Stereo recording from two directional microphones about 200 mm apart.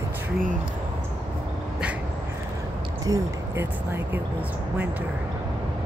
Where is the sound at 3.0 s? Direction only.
15° right (ahead or behind).